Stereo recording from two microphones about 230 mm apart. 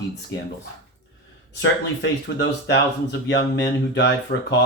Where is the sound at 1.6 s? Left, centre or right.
Left.